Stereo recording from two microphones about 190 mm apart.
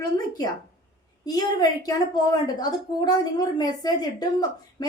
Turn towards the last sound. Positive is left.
turn(degrees=20)  # may be behind; listen again after turning